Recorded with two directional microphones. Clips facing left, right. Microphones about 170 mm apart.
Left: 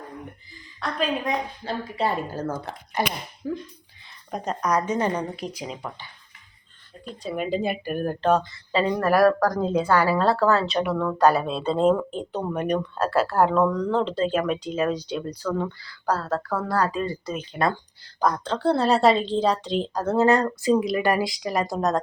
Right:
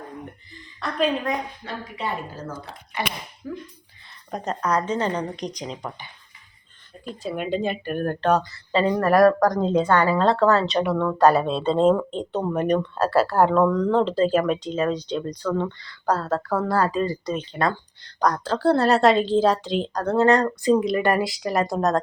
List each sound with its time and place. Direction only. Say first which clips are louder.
0.8 s speech: right 3 dB; centre (ahead or behind)
3.4 s speech: left 4 dB; 30° left (ahead or behind)
4.3 s a woman's voice: even; 5° left (ahead or behind)
7.1 s speech: right 1 dB; centre (ahead or behind)
18.2 s speech: right 2 dB; centre (ahead or behind)